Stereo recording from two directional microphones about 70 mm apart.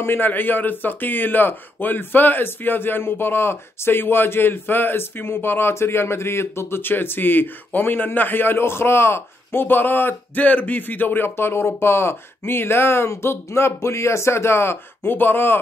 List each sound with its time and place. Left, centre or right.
0.0 s a man's voice: left